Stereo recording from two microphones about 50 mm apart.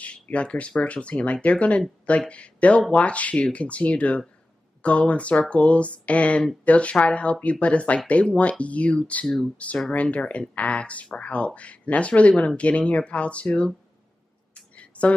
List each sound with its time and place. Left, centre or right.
0.0 s speech: left
10.0 s speech: left
14.5 s a sound: left